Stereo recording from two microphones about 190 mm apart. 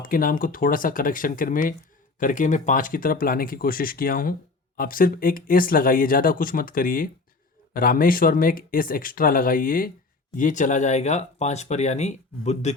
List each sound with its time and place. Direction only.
0.0 s speech: 45° left (ahead or behind)